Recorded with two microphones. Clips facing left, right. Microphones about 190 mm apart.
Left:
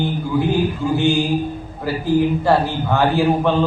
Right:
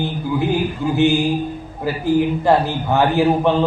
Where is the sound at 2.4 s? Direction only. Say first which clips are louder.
Right 1 dB; 20° right (ahead or behind).